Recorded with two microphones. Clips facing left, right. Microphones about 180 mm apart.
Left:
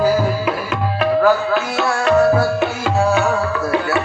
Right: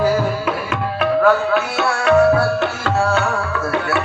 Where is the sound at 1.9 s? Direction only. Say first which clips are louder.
Right 1 dB; centre (ahead or behind).